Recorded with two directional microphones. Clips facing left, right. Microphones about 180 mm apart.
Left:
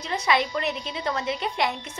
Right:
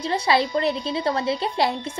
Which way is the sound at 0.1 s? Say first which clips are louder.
Right 3 dB; 30° right (ahead or behind).